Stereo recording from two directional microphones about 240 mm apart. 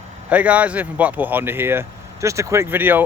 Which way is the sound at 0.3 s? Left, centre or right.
Centre.